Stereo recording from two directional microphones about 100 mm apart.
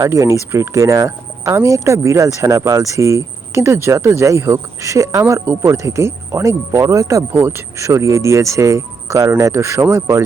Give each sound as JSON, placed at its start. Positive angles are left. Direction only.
{"t": 0.0, "sound": "speech", "side_deg": -30}